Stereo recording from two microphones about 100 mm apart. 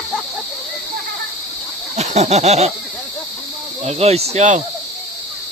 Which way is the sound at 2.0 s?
90° right.